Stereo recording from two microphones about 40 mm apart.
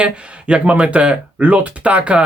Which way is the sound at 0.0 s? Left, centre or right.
Right.